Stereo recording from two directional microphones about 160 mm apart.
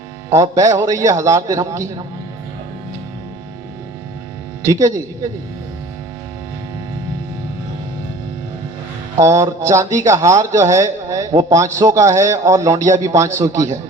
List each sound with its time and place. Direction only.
0.3 s a man's voice: 20° right (ahead or behind)
4.6 s a man's voice: 20° right (ahead or behind)
9.1 s a man's voice: 20° right (ahead or behind)